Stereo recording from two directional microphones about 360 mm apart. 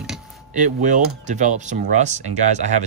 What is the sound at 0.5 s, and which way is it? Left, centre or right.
Speech, right.